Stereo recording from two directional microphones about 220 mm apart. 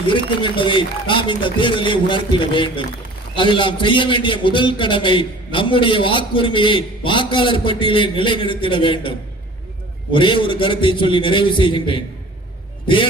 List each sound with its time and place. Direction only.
0.1 s a man's voice: 20° left (ahead or behind)